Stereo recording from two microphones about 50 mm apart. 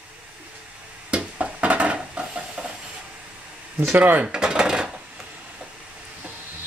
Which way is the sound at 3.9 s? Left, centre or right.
Right.